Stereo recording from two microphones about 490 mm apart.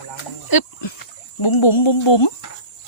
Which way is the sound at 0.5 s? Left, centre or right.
Left.